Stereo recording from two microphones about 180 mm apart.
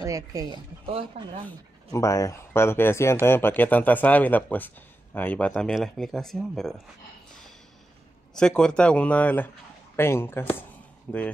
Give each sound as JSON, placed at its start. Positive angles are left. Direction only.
{"t": 0.0, "sound": "speech", "side_deg": -20}
{"t": 0.8, "sound": "speech", "side_deg": -30}
{"t": 1.9, "sound": "speech", "side_deg": 15}
{"t": 8.4, "sound": "speech", "side_deg": 5}